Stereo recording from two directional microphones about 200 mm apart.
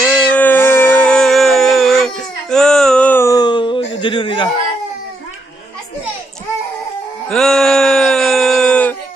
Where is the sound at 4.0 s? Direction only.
25° left (ahead or behind).